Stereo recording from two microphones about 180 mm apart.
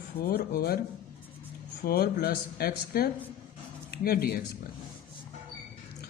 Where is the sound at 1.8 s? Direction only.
60° left (ahead or behind).